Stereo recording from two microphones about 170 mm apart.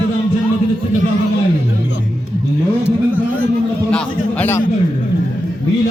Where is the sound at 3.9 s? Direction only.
5° left (ahead or behind).